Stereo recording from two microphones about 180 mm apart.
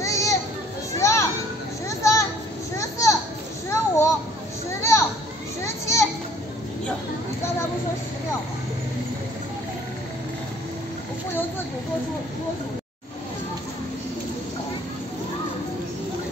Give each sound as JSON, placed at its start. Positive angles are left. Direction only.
{"t": 0.0, "sound": "children playing", "side_deg": 15}
{"t": 1.9, "sound": "a sound", "side_deg": 15}
{"t": 3.7, "sound": "children playing", "side_deg": 15}